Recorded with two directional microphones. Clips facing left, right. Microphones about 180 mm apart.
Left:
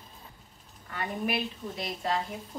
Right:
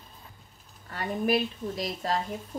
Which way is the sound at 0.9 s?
40° right (ahead or behind).